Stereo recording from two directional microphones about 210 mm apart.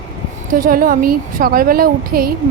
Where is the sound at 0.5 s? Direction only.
45° right (ahead or behind).